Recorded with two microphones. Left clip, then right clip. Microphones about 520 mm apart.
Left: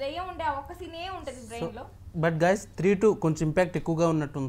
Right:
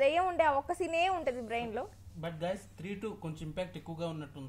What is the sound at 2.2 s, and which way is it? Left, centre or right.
Speech, left.